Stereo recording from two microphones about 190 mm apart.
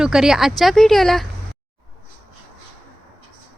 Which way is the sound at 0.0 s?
5° right (ahead or behind).